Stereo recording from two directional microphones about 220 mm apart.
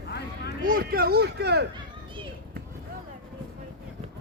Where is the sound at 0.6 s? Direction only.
40° right (ahead or behind).